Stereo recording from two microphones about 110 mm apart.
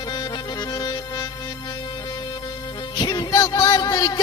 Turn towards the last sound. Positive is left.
turn(degrees=35)  # may be behind; listen again after turning